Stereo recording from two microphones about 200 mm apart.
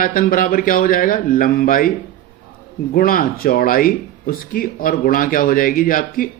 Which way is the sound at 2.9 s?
45° left (ahead or behind).